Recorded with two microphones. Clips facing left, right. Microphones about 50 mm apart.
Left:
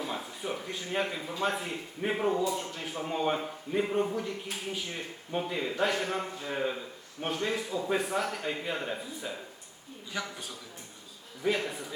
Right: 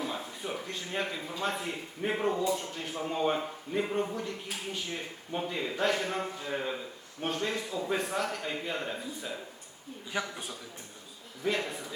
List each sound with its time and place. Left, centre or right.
0.0 s a man's voice: centre
10.1 s a man's voice: centre
11.4 s a man's voice: centre